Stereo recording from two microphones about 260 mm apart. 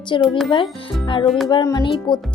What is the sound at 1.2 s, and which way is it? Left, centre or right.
Music, centre.